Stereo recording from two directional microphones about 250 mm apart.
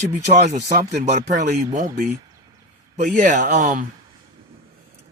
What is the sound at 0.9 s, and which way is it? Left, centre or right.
A man's voice, right.